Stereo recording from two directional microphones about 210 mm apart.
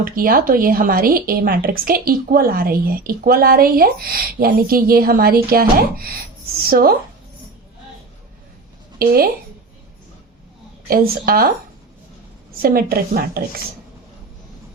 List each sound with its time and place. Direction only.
0.0 s a woman's voice: 45° right (ahead or behind)
6.7 s a woman's voice: 45° right (ahead or behind)
9.0 s a woman's voice: 45° right (ahead or behind)
10.8 s a woman's voice: 45° right (ahead or behind)
12.6 s a woman's voice: 45° right (ahead or behind)